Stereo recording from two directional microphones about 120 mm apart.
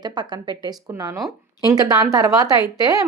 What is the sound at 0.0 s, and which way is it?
A woman's voice, 35° right (ahead or behind).